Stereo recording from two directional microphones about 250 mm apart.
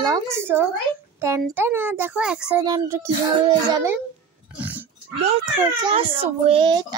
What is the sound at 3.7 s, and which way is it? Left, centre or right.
Speech, centre.